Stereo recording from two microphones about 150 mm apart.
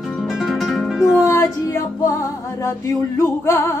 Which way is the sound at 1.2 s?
20° left (ahead or behind).